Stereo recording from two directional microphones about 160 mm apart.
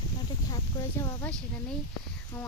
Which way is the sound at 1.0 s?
10° left (ahead or behind).